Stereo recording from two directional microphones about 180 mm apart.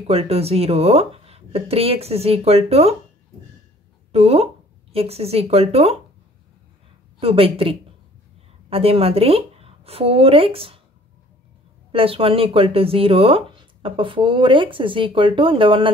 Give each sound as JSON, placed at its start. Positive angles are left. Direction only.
{"t": 0.0, "sound": "speech", "side_deg": -35}
{"t": 4.1, "sound": "speech", "side_deg": -35}
{"t": 7.2, "sound": "a woman's voice", "side_deg": -30}
{"t": 11.9, "sound": "speech", "side_deg": -30}